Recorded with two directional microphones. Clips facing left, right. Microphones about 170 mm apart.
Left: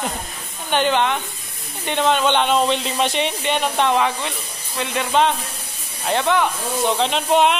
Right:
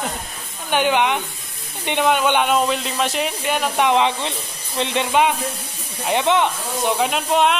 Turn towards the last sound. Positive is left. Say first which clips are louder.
# left 1 dB
turn(degrees=0)  # may be behind; listen again after turning